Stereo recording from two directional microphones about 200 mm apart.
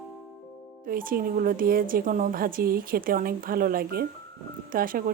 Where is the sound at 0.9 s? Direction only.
45° right (ahead or behind).